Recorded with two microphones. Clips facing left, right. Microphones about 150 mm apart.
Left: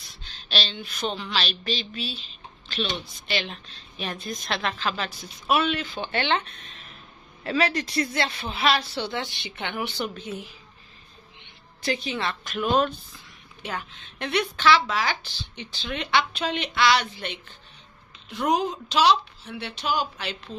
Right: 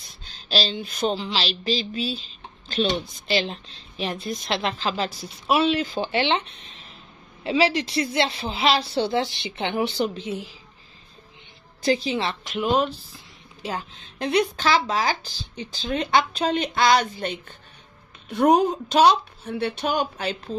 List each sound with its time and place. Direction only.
0.5 s speech: 35° right (ahead or behind)
6.1 s speech: 25° right (ahead or behind)
11.8 s speech: 30° right (ahead or behind)
13.6 s a woman's voice: 30° right (ahead or behind)